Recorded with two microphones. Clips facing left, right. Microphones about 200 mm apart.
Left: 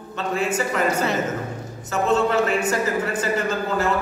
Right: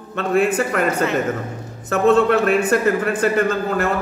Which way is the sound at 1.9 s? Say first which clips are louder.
Right 5 dB; 60° right (ahead or behind).